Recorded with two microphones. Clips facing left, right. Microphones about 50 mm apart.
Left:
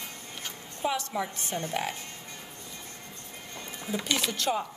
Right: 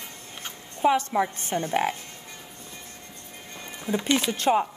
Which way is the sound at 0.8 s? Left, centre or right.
Right.